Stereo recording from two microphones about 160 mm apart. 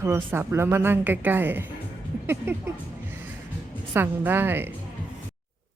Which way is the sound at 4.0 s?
15° right (ahead or behind).